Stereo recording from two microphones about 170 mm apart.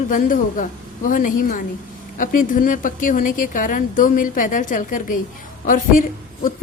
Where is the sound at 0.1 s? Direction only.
50° left (ahead or behind).